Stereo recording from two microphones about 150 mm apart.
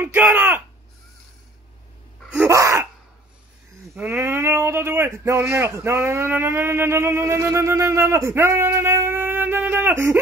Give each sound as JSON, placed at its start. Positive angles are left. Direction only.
{"t": 0.0, "sound": "speech", "side_deg": -15}
{"t": 2.3, "sound": "gasp", "side_deg": -20}
{"t": 4.1, "sound": "speech", "side_deg": -15}